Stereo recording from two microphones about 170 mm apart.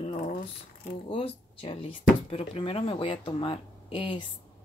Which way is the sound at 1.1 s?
35° left (ahead or behind).